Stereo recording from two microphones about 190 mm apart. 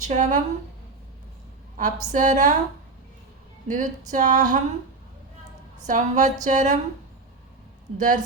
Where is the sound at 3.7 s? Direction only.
35° right (ahead or behind).